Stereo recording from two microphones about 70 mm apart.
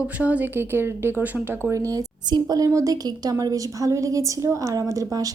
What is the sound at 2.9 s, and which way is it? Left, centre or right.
A woman's voice, right.